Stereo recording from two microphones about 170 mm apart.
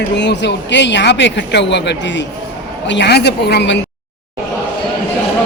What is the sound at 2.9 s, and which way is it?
Speech, 85° left.